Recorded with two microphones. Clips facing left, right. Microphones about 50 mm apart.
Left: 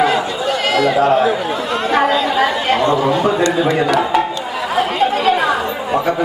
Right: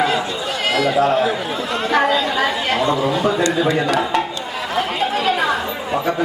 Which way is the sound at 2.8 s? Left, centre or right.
Centre.